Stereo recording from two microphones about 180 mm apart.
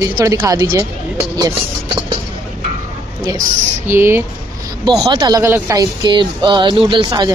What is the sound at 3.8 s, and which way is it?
Speech, 15° right (ahead or behind).